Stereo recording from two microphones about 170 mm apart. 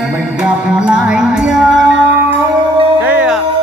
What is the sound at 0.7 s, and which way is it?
Music, 5° right (ahead or behind).